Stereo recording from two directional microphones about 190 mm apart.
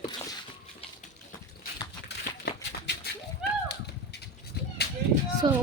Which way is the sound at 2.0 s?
60° left (ahead or behind).